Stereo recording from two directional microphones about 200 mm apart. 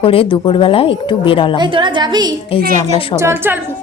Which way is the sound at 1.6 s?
25° right (ahead or behind).